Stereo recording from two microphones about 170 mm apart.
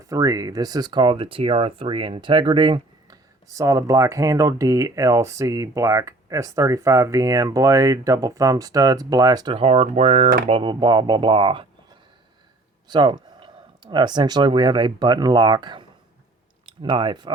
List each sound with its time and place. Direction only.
0.1 s speech: 20° right (ahead or behind); by 10.2 s 40° right (ahead or behind)
10.5 s speech: 25° right (ahead or behind)
12.9 s speech: 25° right (ahead or behind)